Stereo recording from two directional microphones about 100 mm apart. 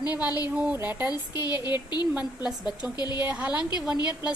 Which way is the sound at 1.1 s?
40° left (ahead or behind).